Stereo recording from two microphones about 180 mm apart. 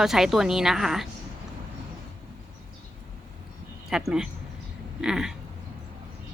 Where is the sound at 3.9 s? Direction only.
5° right (ahead or behind).